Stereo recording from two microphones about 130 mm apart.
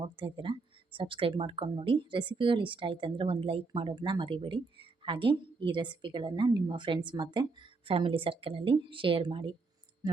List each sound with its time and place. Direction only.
0.3 s speech: 40° right (ahead or behind)